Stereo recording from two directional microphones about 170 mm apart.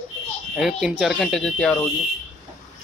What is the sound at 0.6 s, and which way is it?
Speech, centre (ahead or behind).